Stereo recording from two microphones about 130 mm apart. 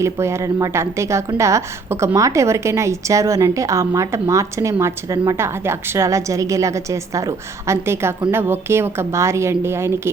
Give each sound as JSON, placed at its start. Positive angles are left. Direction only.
{"t": 0.0, "sound": "a woman's voice", "side_deg": -20}